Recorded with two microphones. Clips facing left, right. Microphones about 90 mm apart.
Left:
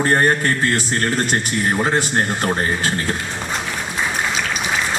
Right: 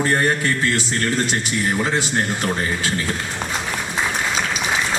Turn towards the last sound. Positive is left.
turn(degrees=45)  # may be behind; listen again after turning